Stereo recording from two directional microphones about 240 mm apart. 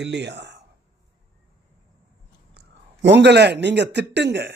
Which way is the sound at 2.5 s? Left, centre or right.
Right.